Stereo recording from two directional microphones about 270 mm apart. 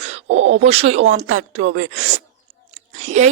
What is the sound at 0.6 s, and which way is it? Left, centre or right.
Speech, right.